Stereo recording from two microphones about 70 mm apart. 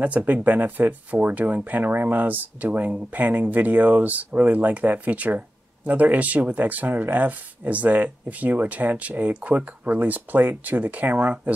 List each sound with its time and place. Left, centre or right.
0.0 s speech: right